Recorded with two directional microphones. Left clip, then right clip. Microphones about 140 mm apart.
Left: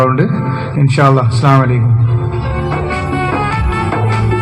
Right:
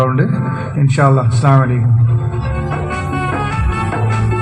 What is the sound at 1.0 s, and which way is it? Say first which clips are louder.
Music: left 3 dB; 30° left (ahead or behind).